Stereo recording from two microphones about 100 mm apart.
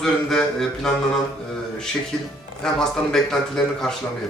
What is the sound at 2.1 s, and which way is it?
A man's voice, 10° left (ahead or behind).